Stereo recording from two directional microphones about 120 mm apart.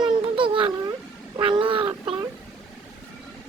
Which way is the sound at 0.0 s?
45° right (ahead or behind).